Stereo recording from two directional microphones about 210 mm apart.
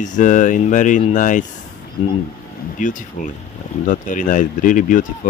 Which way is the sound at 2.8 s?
40° left (ahead or behind).